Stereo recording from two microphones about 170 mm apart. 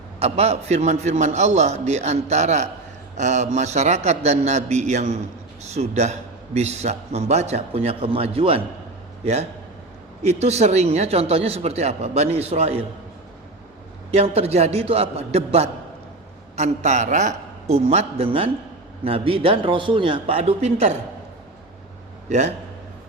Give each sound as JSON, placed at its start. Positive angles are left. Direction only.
{"t": 0.2, "sound": "a man's voice", "side_deg": -35}
{"t": 14.1, "sound": "a man's voice", "side_deg": -40}
{"t": 22.3, "sound": "a man's voice", "side_deg": -40}